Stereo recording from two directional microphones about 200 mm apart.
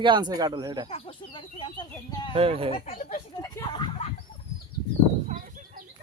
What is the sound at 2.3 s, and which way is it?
Speech, 30° right (ahead or behind).